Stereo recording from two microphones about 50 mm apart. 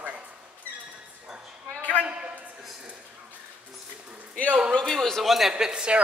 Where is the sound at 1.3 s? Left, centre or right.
Right.